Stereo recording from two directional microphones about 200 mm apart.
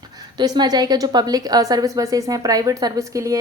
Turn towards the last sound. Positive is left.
turn(degrees=-15)  # may be behind; listen again after turning